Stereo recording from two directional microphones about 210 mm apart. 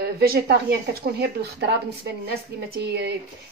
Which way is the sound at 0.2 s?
45° right (ahead or behind).